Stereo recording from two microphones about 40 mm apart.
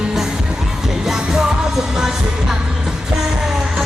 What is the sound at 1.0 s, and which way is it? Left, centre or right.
Music, centre.